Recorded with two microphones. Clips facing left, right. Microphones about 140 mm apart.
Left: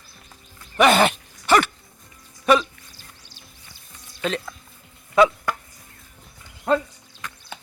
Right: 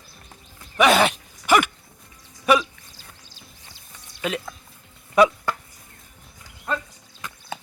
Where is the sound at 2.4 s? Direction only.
5° right (ahead or behind).